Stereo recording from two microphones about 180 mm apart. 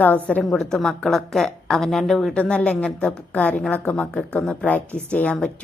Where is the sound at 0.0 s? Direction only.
10° left (ahead or behind).